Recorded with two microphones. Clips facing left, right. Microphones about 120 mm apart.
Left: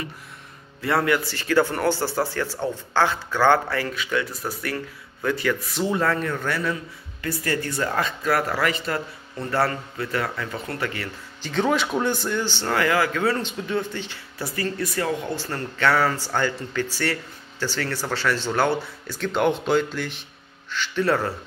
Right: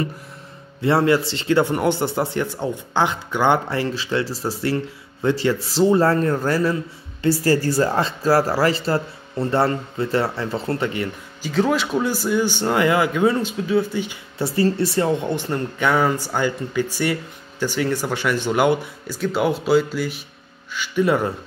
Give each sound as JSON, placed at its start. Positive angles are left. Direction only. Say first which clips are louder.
{"t": 0.7, "sound": "a man's voice", "louder": "right 5 dB", "side_deg": -25}
{"t": 11.4, "sound": "speech", "louder": "right 3 dB", "side_deg": 0}
{"t": 14.4, "sound": "speech", "louder": "right 8 dB", "side_deg": -30}